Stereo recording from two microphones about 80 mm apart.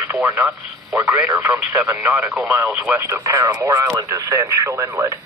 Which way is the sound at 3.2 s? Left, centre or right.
Right.